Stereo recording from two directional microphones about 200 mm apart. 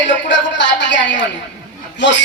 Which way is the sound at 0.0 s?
65° left (ahead or behind).